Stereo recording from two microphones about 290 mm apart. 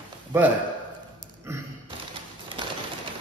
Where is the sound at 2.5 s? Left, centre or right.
Centre.